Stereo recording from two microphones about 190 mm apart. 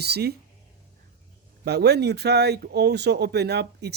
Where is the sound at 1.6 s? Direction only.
60° right (ahead or behind).